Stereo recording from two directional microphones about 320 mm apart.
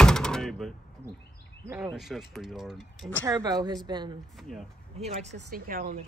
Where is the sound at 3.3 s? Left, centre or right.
Centre.